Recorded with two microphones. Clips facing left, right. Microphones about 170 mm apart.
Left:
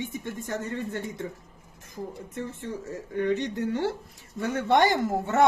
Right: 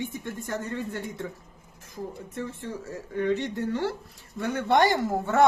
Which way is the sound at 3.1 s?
20° left (ahead or behind).